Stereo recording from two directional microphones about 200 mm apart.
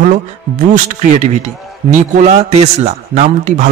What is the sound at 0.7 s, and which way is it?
A man's voice, 35° right (ahead or behind).